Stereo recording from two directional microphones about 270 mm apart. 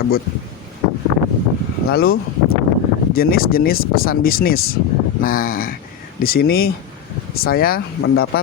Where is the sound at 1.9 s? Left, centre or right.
Left.